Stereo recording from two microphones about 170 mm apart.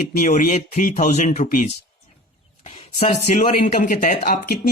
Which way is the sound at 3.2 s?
45° left (ahead or behind).